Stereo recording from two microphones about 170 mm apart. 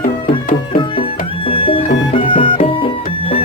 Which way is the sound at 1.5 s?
30° left (ahead or behind).